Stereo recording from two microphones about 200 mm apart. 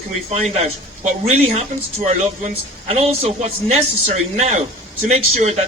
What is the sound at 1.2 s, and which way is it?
Speech, 35° right (ahead or behind).